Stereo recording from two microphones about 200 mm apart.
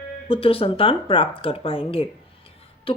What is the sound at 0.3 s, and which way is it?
Speech, 30° left (ahead or behind).